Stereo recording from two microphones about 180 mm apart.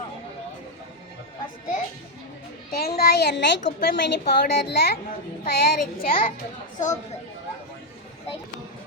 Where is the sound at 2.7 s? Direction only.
60° left (ahead or behind).